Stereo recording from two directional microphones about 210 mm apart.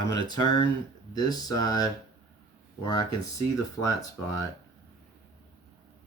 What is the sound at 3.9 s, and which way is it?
Speech, 15° left (ahead or behind).